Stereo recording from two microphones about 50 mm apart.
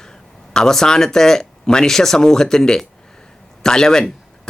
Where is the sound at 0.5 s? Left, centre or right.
Centre.